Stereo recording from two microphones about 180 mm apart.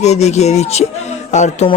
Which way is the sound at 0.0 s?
40° left (ahead or behind).